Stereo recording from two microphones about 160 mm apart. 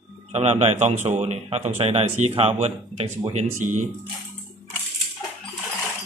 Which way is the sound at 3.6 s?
50° right (ahead or behind).